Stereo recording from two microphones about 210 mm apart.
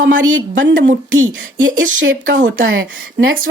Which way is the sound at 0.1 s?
65° right (ahead or behind).